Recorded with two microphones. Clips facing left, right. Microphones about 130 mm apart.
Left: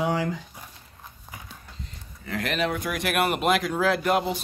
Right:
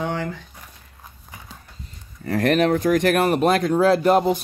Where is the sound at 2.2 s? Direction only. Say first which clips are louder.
Right 9 dB; 45° right (ahead or behind).